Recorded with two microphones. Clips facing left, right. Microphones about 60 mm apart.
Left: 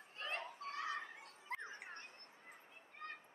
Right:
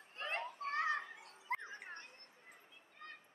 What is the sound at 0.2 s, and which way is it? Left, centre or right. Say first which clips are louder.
Children playing: right 4 dB; right.